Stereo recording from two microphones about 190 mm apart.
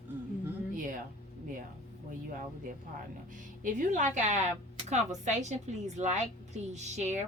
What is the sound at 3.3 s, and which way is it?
A woman's voice, 45° right (ahead or behind).